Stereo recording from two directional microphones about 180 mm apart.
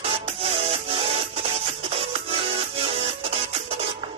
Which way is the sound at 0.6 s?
35° right (ahead or behind).